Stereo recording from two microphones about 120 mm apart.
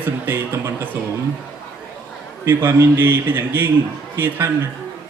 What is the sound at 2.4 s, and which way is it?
Speech, 20° right (ahead or behind).